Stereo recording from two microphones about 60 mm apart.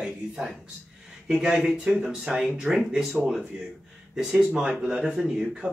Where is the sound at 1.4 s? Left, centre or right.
Centre.